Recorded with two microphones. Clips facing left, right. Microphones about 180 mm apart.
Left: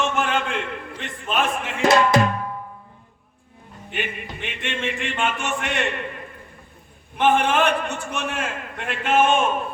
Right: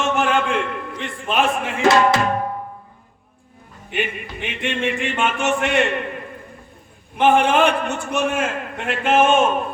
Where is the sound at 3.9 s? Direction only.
50° right (ahead or behind).